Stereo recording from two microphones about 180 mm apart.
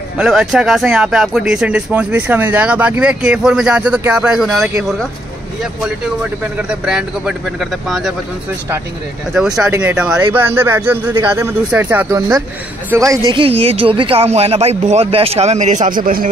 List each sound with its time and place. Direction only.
0.2 s speech: centre (ahead or behind)
5.8 s speech: 5° right (ahead or behind)
9.3 s speech: 5° right (ahead or behind)
13.3 s speech: 30° right (ahead or behind)